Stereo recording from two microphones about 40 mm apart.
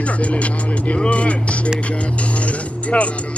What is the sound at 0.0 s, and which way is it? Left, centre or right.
Speech, left.